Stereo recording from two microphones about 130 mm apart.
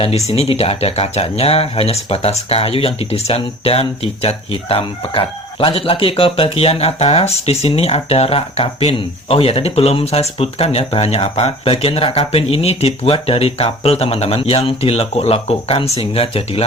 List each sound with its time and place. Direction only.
0.3 s speech: 50° left (ahead or behind)